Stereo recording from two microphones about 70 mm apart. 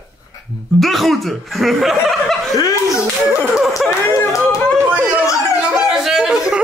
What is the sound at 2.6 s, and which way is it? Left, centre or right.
Speech, left.